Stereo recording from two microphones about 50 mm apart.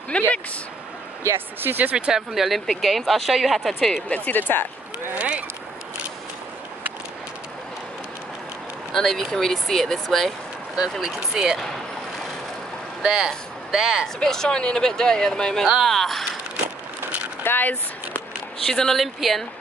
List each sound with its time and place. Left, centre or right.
0.1 s speech: left
1.6 s speech: right
1.9 s speech: centre
2.3 s speech: centre
4.1 s speech: left
5.1 s boat: right
8.9 s speech: centre
13.0 s speech: centre
14.0 s speech: centre
17.4 s a sound: left
18.7 s speech: centre
18.9 s speech: centre